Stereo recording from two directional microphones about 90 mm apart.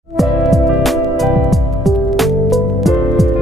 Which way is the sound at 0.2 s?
Centre (ahead or behind).